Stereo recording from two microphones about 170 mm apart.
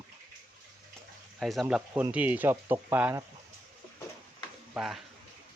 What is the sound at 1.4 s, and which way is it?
Speech, centre (ahead or behind).